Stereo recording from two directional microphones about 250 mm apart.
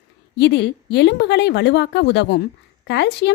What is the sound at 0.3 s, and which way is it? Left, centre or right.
Speech, left.